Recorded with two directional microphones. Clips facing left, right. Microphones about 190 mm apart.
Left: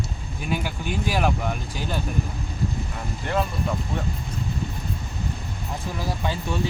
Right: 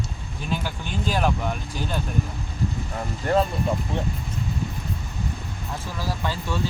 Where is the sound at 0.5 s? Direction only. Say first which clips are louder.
Left 2 dB; 10° left (ahead or behind).